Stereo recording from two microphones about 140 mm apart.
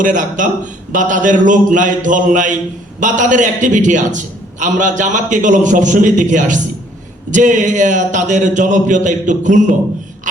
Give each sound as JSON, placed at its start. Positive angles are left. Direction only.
{"t": 0.0, "sound": "a man's voice", "side_deg": -65}